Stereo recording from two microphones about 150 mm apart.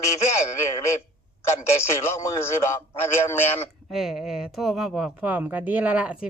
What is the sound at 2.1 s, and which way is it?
Speech, 15° left (ahead or behind).